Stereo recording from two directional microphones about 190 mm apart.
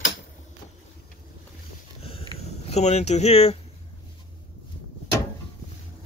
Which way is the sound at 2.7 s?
35° left (ahead or behind).